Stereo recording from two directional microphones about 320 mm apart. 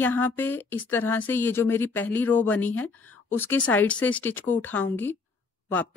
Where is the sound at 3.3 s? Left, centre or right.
Centre.